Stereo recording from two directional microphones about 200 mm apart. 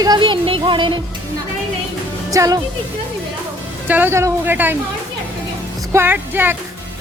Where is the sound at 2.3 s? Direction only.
15° right (ahead or behind).